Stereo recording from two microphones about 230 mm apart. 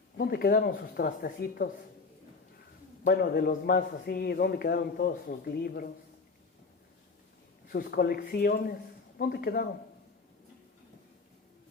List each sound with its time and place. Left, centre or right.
0.2 s a man's voice: left
3.0 s a man's voice: left
7.7 s a man's voice: left